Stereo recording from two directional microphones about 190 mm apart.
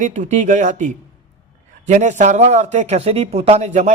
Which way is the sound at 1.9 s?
40° right (ahead or behind).